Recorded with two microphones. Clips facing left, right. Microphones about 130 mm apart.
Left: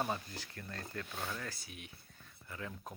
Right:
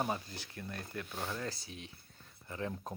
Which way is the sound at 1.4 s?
30° right (ahead or behind).